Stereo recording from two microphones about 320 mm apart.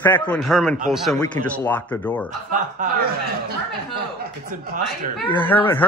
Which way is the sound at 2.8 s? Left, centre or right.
Right.